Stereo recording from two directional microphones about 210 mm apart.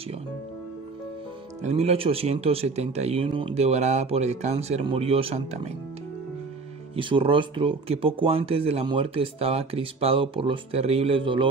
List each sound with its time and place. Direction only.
1.6 s speech: 30° right (ahead or behind)
7.0 s speech: 25° right (ahead or behind)